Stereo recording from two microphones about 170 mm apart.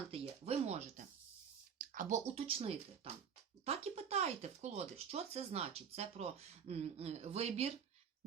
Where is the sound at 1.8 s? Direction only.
50° right (ahead or behind).